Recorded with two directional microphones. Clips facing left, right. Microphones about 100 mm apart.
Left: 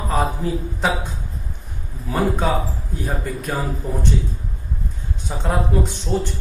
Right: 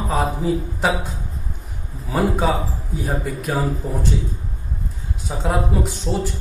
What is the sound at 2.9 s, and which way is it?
Speech, centre (ahead or behind).